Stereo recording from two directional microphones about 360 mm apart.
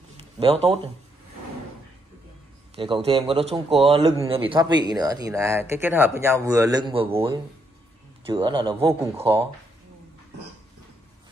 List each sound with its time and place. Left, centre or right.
0.4 s a man's voice: centre
2.7 s a man's voice: centre